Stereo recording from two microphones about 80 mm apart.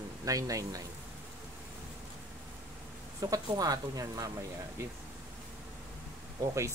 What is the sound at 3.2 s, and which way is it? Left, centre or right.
Speech, right.